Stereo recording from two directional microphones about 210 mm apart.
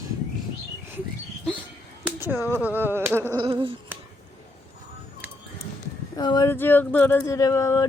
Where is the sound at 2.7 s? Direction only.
10° right (ahead or behind).